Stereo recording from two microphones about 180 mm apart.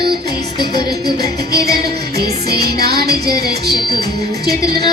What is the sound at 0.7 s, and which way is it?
Music, 25° left (ahead or behind).